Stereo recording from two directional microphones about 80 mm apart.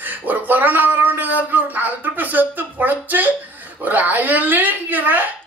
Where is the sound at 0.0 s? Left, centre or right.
Right.